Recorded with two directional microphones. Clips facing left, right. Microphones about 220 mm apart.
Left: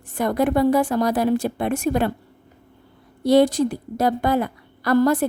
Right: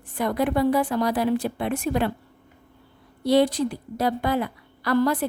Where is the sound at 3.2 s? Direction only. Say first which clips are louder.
Left 4 dB; 45° left (ahead or behind).